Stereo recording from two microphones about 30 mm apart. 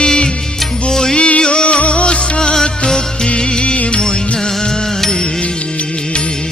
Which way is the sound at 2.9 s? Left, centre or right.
Left.